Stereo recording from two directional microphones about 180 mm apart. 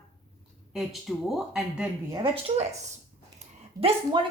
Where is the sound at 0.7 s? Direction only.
Centre (ahead or behind).